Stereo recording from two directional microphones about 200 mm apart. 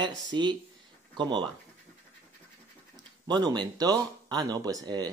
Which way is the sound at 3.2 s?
20° right (ahead or behind).